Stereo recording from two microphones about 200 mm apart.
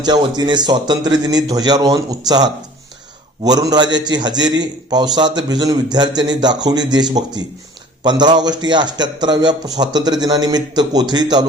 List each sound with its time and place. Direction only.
0.0 s a man's voice: 20° right (ahead or behind)